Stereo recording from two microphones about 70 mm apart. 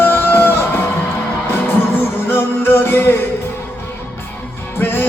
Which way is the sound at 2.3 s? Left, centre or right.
Left.